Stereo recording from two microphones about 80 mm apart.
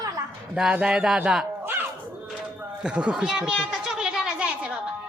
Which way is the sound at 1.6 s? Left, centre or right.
Right.